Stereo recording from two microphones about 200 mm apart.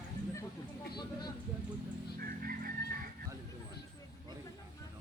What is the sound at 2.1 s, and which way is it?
Chicken, 45° right (ahead or behind).